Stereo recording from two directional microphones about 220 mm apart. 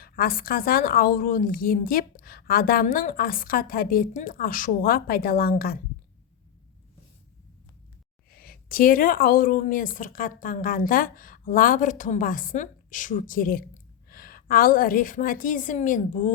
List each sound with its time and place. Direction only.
0.0 s a woman's voice: 40° left (ahead or behind)
8.4 s a woman's voice: 40° left (ahead or behind)